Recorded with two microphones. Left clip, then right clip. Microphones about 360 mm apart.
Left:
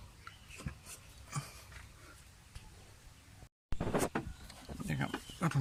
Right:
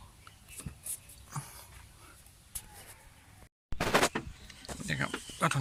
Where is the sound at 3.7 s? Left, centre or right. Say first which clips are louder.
Right 8 dB; right.